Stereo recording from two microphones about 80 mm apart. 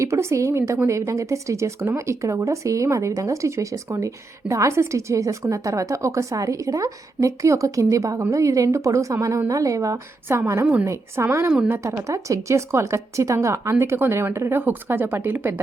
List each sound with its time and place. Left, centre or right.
0.0 s speech: right
10.2 s speech: right